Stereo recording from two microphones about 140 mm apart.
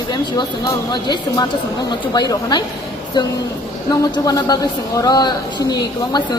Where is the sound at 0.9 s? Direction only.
30° left (ahead or behind).